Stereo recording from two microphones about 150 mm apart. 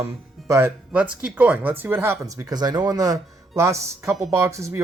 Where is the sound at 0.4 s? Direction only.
20° right (ahead or behind).